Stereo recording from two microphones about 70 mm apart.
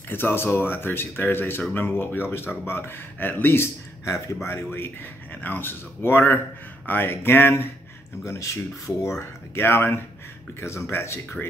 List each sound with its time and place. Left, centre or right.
0.1 s speech: left
4.6 s speech: left
8.2 s speech: left
9.5 s speech: left